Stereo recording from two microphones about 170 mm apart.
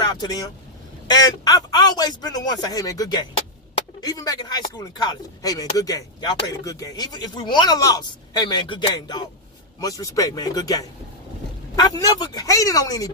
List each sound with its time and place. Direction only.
0.0 s speech: 25° left (ahead or behind)